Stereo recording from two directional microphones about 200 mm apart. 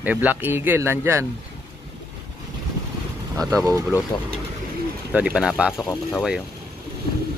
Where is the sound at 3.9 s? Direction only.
15° left (ahead or behind).